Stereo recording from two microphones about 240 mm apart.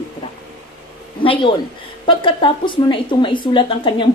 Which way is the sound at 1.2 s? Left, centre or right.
Left.